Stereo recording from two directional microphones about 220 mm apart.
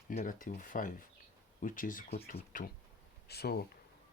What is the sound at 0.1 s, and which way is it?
Speech, 40° left (ahead or behind).